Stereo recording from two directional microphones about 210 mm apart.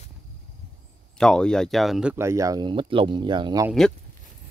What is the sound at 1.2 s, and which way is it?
Speech, 5° left (ahead or behind).